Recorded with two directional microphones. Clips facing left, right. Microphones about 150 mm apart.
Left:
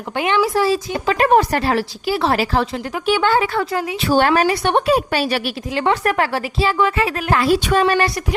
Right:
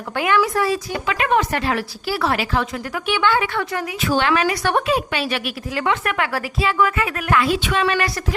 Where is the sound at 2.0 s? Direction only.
20° left (ahead or behind).